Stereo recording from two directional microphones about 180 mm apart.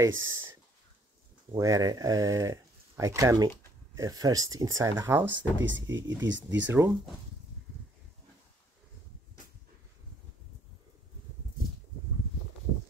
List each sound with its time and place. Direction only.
0.2 s speech: 15° right (ahead or behind)
5.3 s speech: 90° right
6.6 s speech: 15° right (ahead or behind)